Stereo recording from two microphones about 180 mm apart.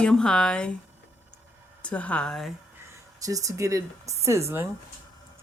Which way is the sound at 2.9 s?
20° right (ahead or behind).